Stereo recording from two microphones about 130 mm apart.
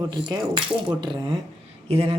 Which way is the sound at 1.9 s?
50° right (ahead or behind).